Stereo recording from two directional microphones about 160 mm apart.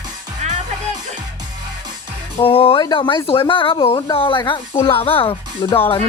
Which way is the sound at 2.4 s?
35° left (ahead or behind).